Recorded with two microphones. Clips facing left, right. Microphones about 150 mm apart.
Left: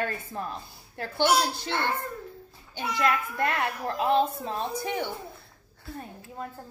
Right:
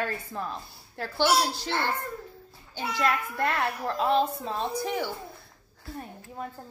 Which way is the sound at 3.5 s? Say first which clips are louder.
Right 1 dB; 20° left (ahead or behind).